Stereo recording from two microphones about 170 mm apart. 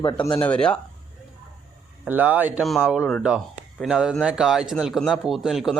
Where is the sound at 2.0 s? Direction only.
10° right (ahead or behind).